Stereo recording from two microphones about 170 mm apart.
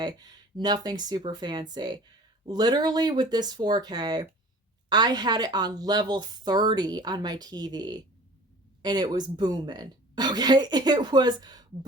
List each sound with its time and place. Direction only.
0.0 s speech: 25° right (ahead or behind)